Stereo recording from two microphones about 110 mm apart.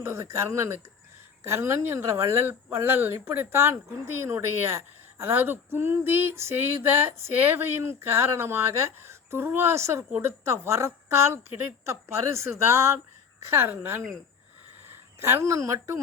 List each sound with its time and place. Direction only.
0.0 s speech: 25° right (ahead or behind)
15.2 s speech: 25° right (ahead or behind)